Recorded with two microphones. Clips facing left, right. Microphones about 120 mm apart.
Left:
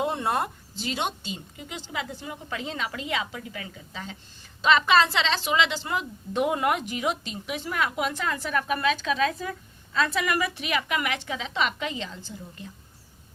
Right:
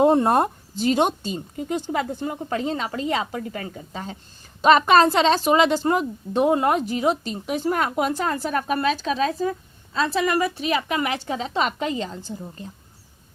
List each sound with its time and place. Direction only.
0.0 s a woman's voice: 45° right (ahead or behind)